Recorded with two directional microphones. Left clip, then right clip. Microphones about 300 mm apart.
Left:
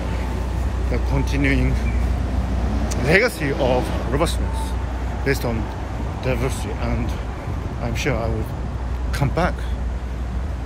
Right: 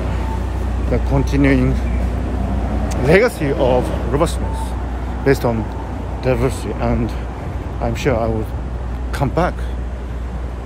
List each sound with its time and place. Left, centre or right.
0.9 s speech: centre
3.1 s speech: centre
5.2 s speech: centre